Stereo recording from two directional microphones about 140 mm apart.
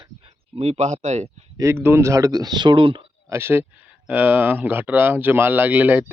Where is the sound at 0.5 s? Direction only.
50° right (ahead or behind).